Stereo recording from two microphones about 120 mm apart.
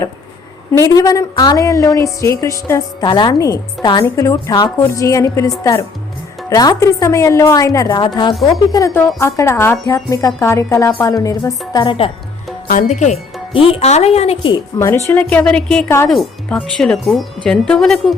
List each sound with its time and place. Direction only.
0.7 s a woman's voice: 30° left (ahead or behind)
3.1 s a woman's voice: 40° left (ahead or behind)
4.0 s a woman's voice: 25° left (ahead or behind)
6.5 s a woman's voice: 30° left (ahead or behind)
7.9 s a woman's voice: 40° left (ahead or behind)
8.7 s a woman's voice: 25° left (ahead or behind)
11.7 s a woman's voice: 40° left (ahead or behind)
12.9 s speech: 80° left
13.5 s speech: 50° left (ahead or behind)
14.8 s a woman's voice: 25° left (ahead or behind); by 18.1 s 5° left (ahead or behind)